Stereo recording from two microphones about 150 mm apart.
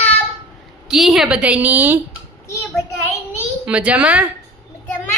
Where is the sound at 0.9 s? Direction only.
5° right (ahead or behind).